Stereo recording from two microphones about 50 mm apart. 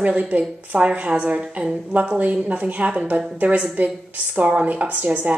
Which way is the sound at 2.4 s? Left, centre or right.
Right.